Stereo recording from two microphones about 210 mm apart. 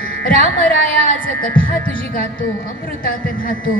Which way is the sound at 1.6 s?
40° left (ahead or behind).